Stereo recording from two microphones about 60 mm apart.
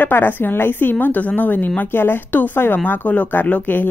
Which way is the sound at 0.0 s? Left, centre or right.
Left.